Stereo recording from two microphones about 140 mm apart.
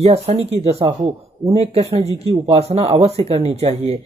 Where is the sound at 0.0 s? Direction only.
50° right (ahead or behind).